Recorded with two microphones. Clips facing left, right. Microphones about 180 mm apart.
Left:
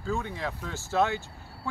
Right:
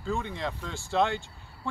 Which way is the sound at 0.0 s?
Centre (ahead or behind).